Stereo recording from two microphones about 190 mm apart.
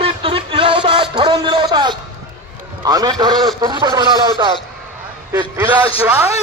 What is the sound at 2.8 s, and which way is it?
Speech, 20° right (ahead or behind).